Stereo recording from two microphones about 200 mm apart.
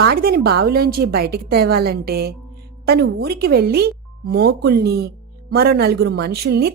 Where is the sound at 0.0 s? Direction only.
50° right (ahead or behind).